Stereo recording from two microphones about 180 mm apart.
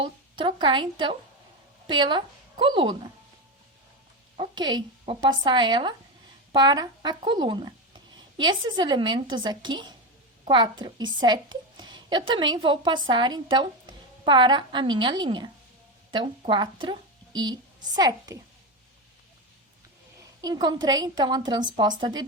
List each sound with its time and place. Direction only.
0.0 s a woman's voice: 25° right (ahead or behind)
4.4 s a woman's voice: 25° right (ahead or behind)
20.4 s a woman's voice: 20° right (ahead or behind)